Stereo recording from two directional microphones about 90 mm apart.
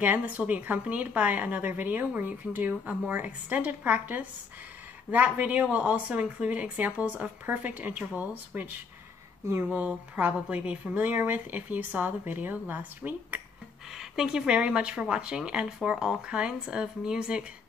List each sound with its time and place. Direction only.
0.0 s a woman's voice: 20° right (ahead or behind)
13.9 s a woman's voice: 5° right (ahead or behind)